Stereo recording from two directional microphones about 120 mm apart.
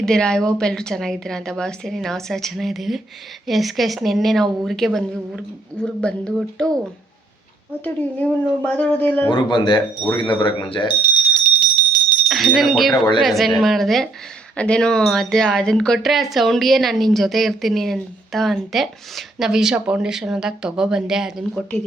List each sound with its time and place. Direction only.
0.0 s a woman's voice: 5° left (ahead or behind)
7.9 s a woman's voice: 10° left (ahead or behind)
9.3 s speech: 40° left (ahead or behind)
11.9 s bicycle bell: 40° left (ahead or behind)
12.3 s speech: centre (ahead or behind)
12.9 s speech: 40° left (ahead or behind)
13.2 s speech: centre (ahead or behind)